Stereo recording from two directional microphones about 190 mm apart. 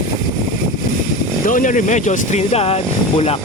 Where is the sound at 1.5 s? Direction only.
45° left (ahead or behind).